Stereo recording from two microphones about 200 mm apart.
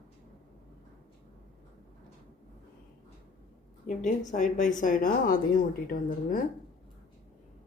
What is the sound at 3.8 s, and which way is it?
Speech, 40° left (ahead or behind).